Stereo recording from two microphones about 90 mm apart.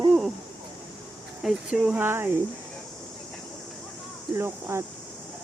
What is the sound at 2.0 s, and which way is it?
Speech, 25° right (ahead or behind).